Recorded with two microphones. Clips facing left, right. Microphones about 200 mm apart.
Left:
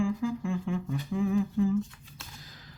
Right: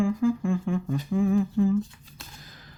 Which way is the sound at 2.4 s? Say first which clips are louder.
Right 1 dB; 55° right (ahead or behind).